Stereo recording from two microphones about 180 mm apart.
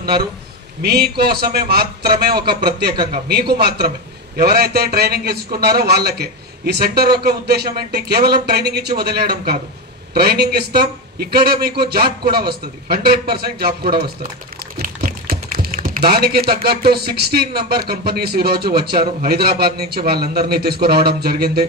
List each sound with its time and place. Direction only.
0.8 s speech: 60° right (ahead or behind)